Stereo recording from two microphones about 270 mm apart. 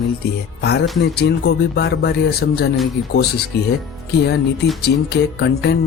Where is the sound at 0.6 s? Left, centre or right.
Left.